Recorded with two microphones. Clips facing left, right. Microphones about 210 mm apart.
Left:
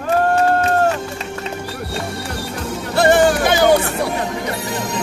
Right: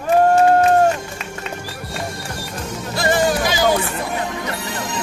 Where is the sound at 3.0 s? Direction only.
65° left (ahead or behind).